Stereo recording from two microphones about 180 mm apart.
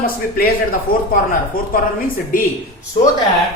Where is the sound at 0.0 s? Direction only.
55° left (ahead or behind).